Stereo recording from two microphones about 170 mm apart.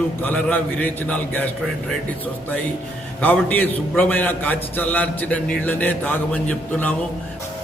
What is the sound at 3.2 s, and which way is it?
A man's voice, 10° left (ahead or behind).